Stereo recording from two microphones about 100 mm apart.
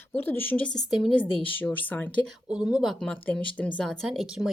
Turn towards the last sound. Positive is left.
turn(degrees=0)  # may be behind; listen again after turning